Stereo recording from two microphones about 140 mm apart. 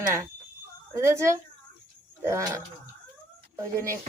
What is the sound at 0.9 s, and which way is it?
Speech, 20° right (ahead or behind).